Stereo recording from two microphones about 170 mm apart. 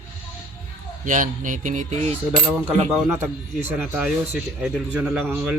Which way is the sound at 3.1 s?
15° right (ahead or behind).